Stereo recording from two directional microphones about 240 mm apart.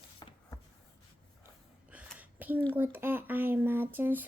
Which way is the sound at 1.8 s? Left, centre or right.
Centre.